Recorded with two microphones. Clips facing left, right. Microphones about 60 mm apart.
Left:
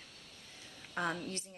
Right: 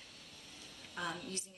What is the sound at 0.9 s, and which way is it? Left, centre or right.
Speech, left.